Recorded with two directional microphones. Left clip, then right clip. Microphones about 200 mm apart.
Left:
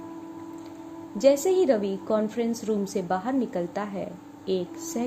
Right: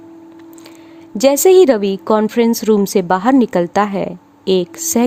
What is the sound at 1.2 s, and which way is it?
A woman's voice, 55° right (ahead or behind).